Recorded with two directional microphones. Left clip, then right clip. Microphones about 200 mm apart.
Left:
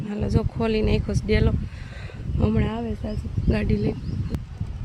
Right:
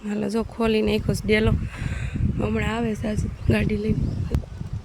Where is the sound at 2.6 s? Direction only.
15° right (ahead or behind).